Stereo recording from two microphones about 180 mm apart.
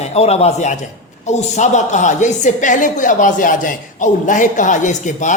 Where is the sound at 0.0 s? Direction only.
35° left (ahead or behind).